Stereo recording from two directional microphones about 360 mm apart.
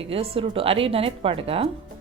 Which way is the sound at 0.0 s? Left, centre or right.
Centre.